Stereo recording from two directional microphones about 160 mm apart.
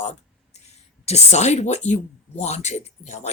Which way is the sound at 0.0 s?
45° left (ahead or behind).